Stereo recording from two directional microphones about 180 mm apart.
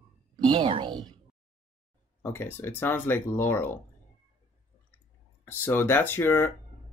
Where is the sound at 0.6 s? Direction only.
30° right (ahead or behind).